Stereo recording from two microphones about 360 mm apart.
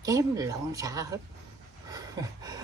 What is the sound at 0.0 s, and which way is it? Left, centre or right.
Speech, centre.